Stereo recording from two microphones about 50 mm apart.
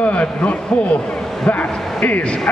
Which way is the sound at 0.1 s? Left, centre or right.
Left.